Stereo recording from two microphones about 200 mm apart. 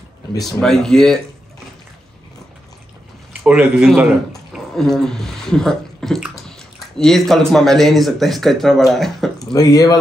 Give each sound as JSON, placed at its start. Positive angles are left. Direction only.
{"t": 0.6, "sound": "speech", "side_deg": 0}
{"t": 3.4, "sound": "speech", "side_deg": -5}
{"t": 9.4, "sound": "speech", "side_deg": 20}